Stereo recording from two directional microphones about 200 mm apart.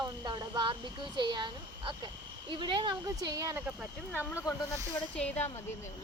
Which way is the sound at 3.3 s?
15° right (ahead or behind).